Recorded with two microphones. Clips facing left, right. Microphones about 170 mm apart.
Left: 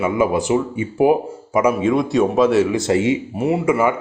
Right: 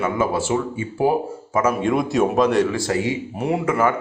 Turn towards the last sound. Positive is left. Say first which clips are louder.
# left 3 dB
turn(degrees=10)  # may be behind; listen again after turning